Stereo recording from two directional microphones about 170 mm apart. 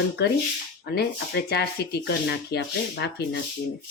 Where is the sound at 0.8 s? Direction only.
70° left (ahead or behind).